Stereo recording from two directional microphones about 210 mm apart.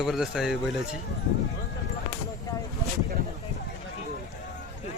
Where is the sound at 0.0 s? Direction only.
Centre (ahead or behind).